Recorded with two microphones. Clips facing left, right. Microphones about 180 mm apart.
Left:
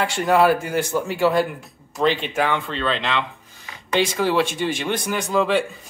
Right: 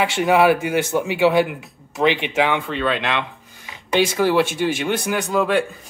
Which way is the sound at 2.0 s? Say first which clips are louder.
Right 2 dB; 15° right (ahead or behind).